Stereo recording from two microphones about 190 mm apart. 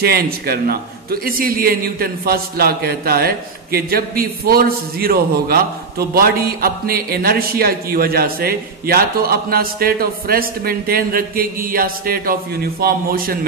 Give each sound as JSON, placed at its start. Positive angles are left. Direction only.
{"t": 0.0, "sound": "a man's voice", "side_deg": -55}